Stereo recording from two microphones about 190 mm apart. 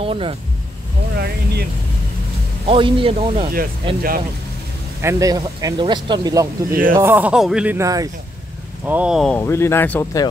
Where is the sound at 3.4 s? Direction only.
50° right (ahead or behind).